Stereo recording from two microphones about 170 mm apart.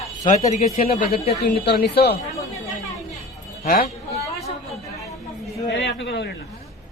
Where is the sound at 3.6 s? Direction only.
60° left (ahead or behind).